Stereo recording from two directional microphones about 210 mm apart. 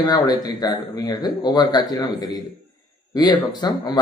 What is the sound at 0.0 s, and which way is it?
A man's voice, 20° left (ahead or behind).